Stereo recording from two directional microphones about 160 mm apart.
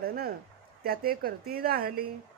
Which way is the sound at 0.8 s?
75° right (ahead or behind).